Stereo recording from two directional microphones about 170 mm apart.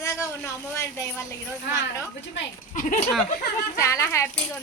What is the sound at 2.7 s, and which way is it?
Speech, 45° left (ahead or behind).